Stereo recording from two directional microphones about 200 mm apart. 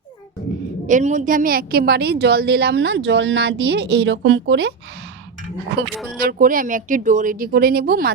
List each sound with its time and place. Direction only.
0.9 s a woman's voice: 40° right (ahead or behind); by 4.7 s 60° right (ahead or behind)
6.1 s speech: 45° right (ahead or behind)